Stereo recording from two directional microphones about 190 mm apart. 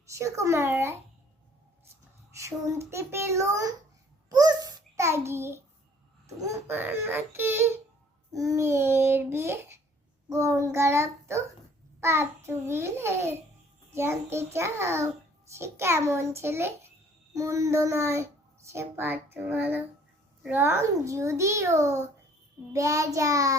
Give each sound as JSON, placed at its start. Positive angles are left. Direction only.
{"t": 0.0, "sound": "a child's voice", "side_deg": -15}
{"t": 2.3, "sound": "a child's voice", "side_deg": -15}
{"t": 4.3, "sound": "a sound", "side_deg": -20}
{"t": 6.2, "sound": "a child's voice", "side_deg": -15}